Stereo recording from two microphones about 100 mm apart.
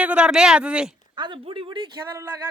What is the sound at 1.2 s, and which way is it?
Speech, 55° right (ahead or behind).